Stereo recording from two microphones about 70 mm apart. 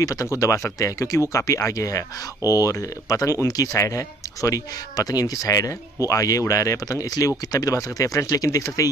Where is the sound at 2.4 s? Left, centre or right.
Right.